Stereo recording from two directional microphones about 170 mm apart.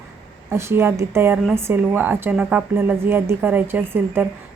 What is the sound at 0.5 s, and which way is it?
A woman's voice, 15° right (ahead or behind).